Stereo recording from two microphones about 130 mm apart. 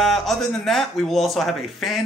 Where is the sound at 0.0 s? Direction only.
Centre (ahead or behind).